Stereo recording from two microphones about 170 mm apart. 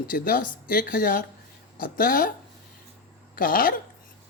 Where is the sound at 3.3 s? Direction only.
55° left (ahead or behind).